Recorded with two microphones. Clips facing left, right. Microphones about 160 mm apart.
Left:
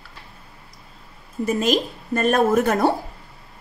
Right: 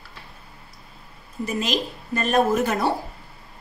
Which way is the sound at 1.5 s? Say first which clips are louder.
Left 4 dB; 50° left (ahead or behind).